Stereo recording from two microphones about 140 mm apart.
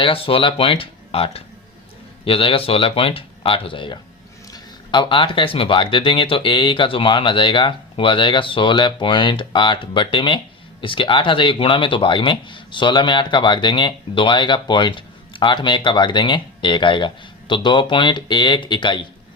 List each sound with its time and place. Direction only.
0.0 s speech: 40° left (ahead or behind)